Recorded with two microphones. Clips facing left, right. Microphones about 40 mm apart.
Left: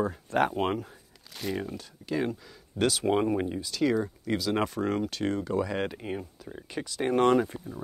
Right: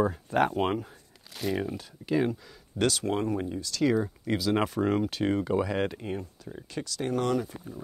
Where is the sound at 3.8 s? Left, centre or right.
Centre.